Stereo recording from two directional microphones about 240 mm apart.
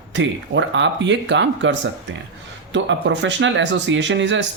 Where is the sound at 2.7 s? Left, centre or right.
Right.